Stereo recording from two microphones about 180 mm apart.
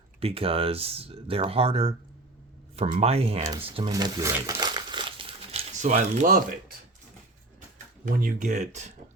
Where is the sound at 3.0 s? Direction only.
35° right (ahead or behind).